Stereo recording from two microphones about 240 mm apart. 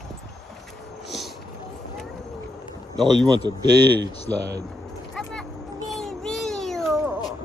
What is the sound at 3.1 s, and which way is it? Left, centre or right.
Speech, centre.